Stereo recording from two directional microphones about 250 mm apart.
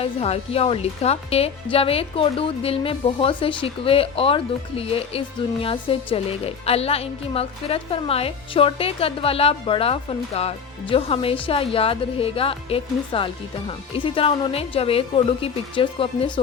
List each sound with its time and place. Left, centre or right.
0.0 s speech: left